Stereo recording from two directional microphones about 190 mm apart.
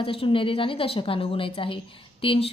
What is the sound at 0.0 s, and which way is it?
Speech, 30° left (ahead or behind).